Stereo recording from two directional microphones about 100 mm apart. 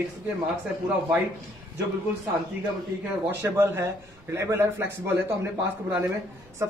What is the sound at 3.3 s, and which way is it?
A man's voice, 25° right (ahead or behind).